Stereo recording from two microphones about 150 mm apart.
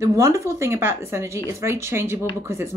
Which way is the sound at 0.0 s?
20° right (ahead or behind).